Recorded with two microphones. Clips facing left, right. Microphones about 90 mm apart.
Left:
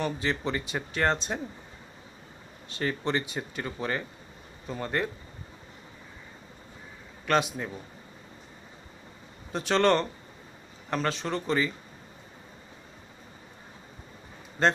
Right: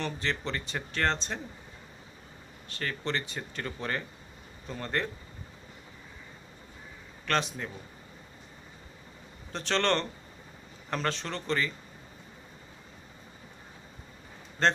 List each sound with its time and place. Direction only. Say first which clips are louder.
0.0 s speech: left 4 dB; 10° left (ahead or behind)
2.7 s speech: left 4 dB; 20° left (ahead or behind)
7.2 s speech: left 4 dB; 10° left (ahead or behind)
9.5 s speech: left 5 dB; 10° left (ahead or behind)
14.6 s speech: left 2 dB; 5° left (ahead or behind)